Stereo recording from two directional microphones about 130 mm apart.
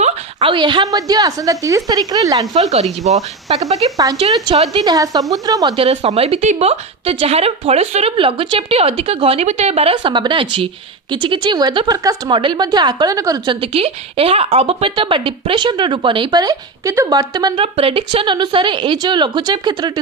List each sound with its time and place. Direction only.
0.3 s a woman's voice: 35° right (ahead or behind)
2.5 s speech: 60° right (ahead or behind)
3.5 s a woman's voice: 45° right (ahead or behind)
3.9 s a woman's voice: 25° right (ahead or behind)
4.5 s a woman's voice: 40° right (ahead or behind)
5.7 s a woman's voice: 50° right (ahead or behind)
8.1 s a woman's voice: 40° right (ahead or behind)
9.9 s a woman's voice: 40° right (ahead or behind)
17.6 s a woman's voice: 45° right (ahead or behind)